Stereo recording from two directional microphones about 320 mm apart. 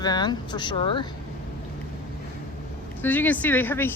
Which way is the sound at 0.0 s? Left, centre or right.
Centre.